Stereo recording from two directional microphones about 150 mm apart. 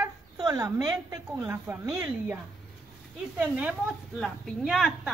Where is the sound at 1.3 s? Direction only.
15° right (ahead or behind).